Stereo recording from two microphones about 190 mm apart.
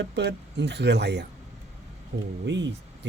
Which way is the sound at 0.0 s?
65° right (ahead or behind).